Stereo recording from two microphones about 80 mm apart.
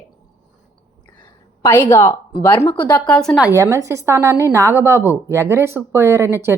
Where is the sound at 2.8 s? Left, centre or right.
Left.